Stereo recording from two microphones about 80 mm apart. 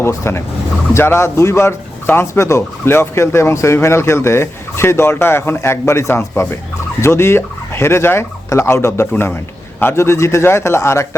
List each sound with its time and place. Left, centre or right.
0.2 s speech: left